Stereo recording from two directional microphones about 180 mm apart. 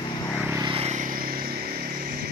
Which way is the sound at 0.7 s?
35° right (ahead or behind).